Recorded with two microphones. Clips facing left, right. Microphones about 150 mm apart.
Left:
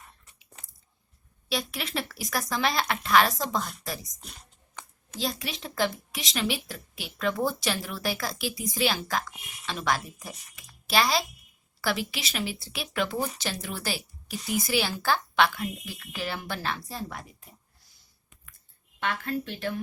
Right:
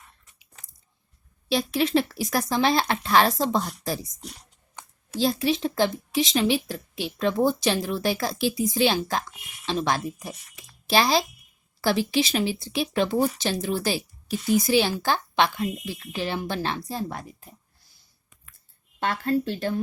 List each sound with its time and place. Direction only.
1.5 s speech: 25° right (ahead or behind)
5.2 s a child's voice: 25° right (ahead or behind)
18.9 s speech: 35° right (ahead or behind)